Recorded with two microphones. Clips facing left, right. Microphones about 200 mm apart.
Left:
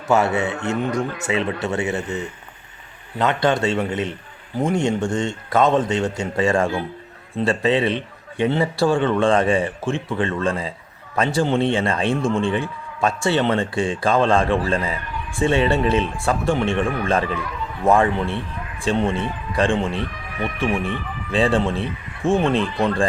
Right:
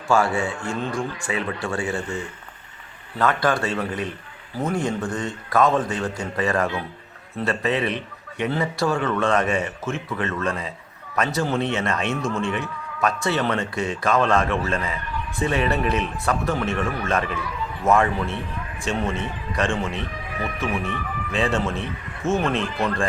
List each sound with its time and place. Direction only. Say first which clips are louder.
0.1 s a man's voice: left 2 dB; 20° left (ahead or behind)
3.2 s a man's voice: left 2 dB; 20° left (ahead or behind)